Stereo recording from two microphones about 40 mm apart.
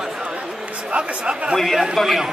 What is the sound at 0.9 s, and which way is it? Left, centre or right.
Speech, right.